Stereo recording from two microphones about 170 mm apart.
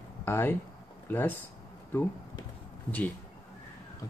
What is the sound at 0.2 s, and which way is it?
Speech, 10° left (ahead or behind).